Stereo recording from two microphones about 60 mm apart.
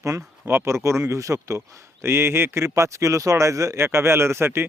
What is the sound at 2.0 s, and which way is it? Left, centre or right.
Speech, right.